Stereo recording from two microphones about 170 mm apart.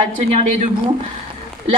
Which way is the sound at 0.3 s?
40° right (ahead or behind).